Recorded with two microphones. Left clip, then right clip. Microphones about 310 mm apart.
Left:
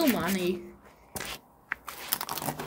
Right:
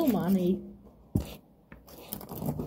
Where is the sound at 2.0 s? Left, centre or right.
Left.